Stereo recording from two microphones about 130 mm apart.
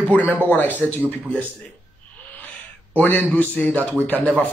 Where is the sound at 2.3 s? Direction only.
15° left (ahead or behind).